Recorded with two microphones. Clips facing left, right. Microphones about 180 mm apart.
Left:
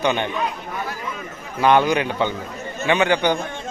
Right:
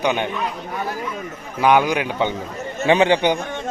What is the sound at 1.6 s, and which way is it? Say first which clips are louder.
Speech: even; 10° right (ahead or behind).